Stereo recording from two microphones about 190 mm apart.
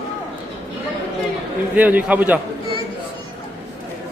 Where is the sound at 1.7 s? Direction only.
10° right (ahead or behind).